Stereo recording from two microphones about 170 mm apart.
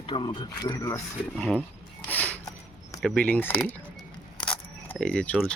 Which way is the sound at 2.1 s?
10° left (ahead or behind).